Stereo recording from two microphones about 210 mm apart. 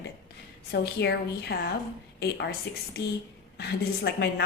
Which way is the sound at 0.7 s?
55° left (ahead or behind).